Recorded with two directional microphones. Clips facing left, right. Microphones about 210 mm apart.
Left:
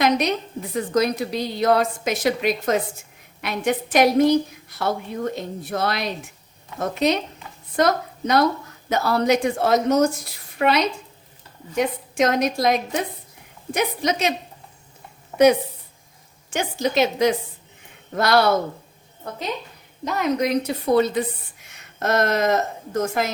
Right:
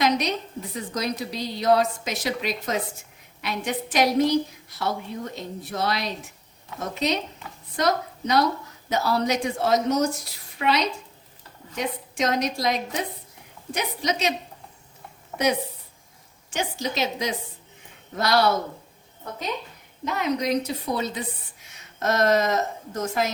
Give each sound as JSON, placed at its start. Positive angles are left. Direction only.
{"t": 0.0, "sound": "a woman's voice", "side_deg": 55}
{"t": 16.5, "sound": "a woman's voice", "side_deg": 55}
{"t": 20.1, "sound": "a woman's voice", "side_deg": 45}